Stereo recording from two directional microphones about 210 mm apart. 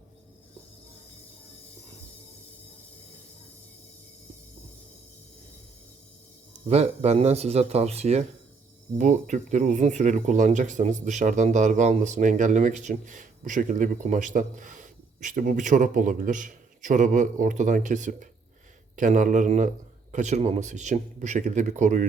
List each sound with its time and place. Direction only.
6.7 s speech: 30° right (ahead or behind)